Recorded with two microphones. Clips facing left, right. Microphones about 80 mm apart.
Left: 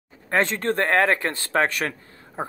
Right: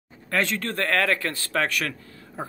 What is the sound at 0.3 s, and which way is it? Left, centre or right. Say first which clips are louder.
Speech: left 4 dB; left.